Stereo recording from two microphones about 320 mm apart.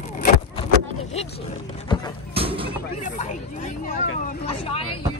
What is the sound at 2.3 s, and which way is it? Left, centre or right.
Speech, centre.